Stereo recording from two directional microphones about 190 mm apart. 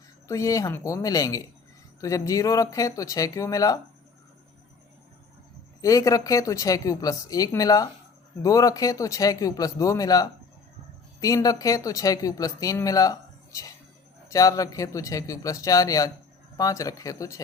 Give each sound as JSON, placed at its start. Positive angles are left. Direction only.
{"t": 0.3, "sound": "speech", "side_deg": 15}
{"t": 5.8, "sound": "speech", "side_deg": 15}